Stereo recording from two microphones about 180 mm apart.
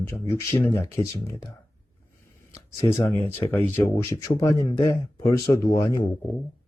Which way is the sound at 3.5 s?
15° left (ahead or behind).